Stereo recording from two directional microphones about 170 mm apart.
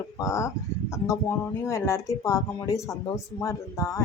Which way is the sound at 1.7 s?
15° left (ahead or behind).